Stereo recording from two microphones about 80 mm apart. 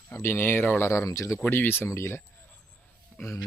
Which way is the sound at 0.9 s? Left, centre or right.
Left.